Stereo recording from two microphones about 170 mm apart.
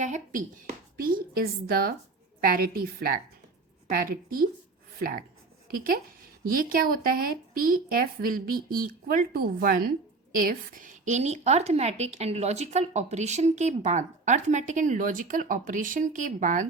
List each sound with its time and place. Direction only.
0.0 s a woman's voice: 50° right (ahead or behind)
0.9 s a woman's voice: 60° right (ahead or behind)